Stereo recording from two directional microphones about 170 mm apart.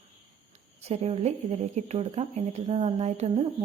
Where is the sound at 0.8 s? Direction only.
35° right (ahead or behind).